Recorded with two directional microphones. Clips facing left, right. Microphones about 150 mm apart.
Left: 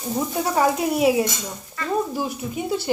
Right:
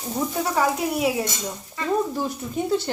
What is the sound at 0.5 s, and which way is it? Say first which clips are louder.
Speech: left 4 dB; 25° left (ahead or behind).